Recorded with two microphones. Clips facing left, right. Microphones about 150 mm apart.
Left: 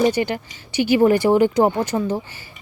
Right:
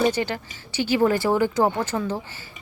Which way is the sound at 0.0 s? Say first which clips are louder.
Left 4 dB; 15° left (ahead or behind).